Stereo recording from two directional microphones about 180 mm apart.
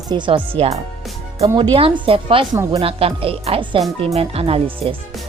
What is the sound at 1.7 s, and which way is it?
Speech, 30° right (ahead or behind).